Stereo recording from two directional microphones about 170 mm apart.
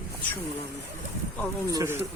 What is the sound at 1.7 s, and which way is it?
Speech, 15° right (ahead or behind).